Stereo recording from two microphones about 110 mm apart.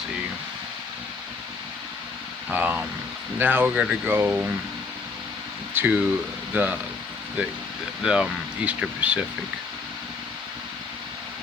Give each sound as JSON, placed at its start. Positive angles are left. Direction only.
{"t": 2.5, "sound": "speech", "side_deg": -15}
{"t": 5.7, "sound": "speech", "side_deg": -15}
{"t": 8.0, "sound": "speech", "side_deg": -10}